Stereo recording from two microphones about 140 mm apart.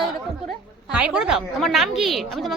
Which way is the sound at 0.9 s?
5° right (ahead or behind).